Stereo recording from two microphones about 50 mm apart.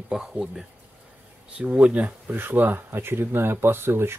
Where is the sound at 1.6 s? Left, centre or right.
Right.